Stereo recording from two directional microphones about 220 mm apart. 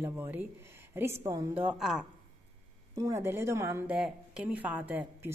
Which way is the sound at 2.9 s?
15° right (ahead or behind).